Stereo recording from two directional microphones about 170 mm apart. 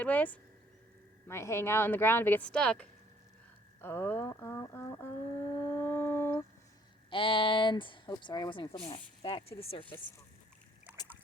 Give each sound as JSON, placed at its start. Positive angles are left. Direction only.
{"t": 0.0, "sound": "speech", "side_deg": 10}
{"t": 5.6, "sound": "a sound", "side_deg": 10}
{"t": 7.1, "sound": "speech", "side_deg": 30}